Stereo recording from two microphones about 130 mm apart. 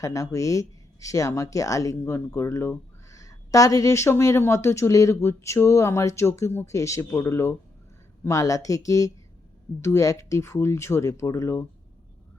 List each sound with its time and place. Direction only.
0.0 s speech: 25° left (ahead or behind)